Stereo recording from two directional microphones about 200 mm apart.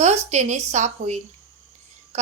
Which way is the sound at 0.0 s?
35° right (ahead or behind).